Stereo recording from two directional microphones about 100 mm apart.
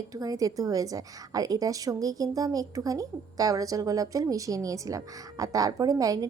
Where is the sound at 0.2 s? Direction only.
35° right (ahead or behind).